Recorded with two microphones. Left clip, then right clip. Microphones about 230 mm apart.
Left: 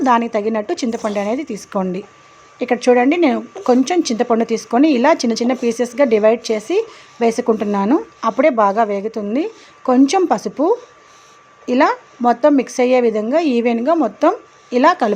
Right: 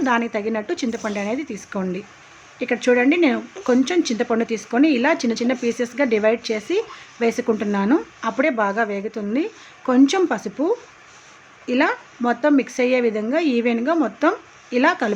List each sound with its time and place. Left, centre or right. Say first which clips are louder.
0.0 s speech: left 6 dB; centre